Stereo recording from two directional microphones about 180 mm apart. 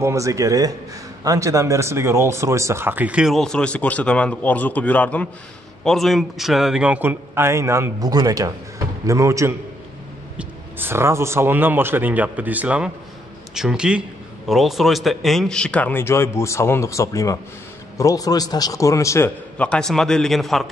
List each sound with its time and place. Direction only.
0.0 s a man's voice: 15° right (ahead or behind); by 20.7 s centre (ahead or behind)